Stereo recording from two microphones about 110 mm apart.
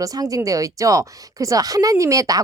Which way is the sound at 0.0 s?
35° right (ahead or behind).